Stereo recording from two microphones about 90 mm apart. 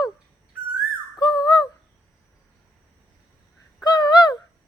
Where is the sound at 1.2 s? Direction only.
50° left (ahead or behind).